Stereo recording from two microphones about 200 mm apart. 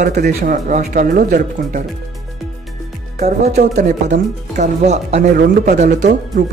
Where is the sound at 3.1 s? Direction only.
35° right (ahead or behind).